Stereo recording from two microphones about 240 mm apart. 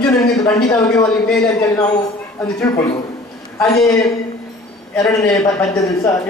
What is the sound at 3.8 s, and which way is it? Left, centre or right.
Speech, centre.